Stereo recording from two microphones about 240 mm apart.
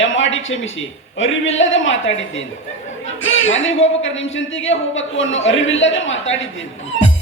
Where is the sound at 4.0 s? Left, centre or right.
Left.